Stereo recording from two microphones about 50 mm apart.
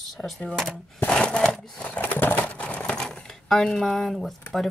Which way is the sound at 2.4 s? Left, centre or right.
Left.